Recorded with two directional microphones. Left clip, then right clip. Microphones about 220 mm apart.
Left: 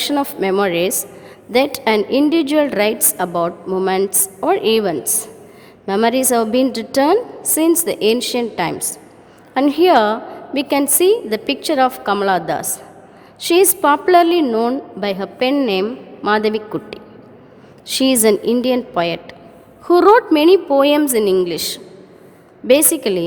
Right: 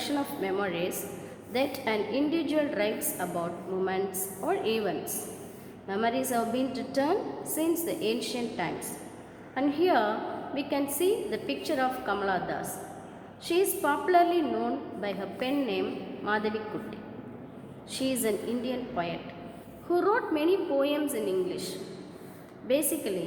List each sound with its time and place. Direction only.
0.0 s a woman's voice: 45° left (ahead or behind)